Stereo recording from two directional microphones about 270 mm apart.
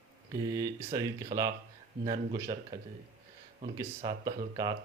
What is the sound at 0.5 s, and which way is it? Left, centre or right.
Speech, centre.